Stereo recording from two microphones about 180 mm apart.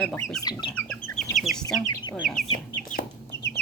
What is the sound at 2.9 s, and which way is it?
Chicken, 65° left (ahead or behind).